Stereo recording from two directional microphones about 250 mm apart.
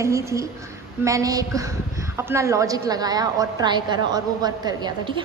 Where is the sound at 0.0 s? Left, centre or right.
Centre.